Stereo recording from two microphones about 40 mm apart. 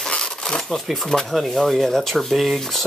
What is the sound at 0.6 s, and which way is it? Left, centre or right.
Speech, centre.